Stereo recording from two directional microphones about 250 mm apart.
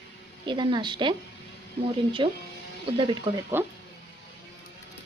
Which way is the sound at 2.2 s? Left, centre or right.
Centre.